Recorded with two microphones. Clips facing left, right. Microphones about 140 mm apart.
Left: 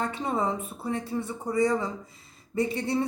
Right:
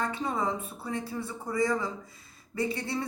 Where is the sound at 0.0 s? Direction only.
25° left (ahead or behind).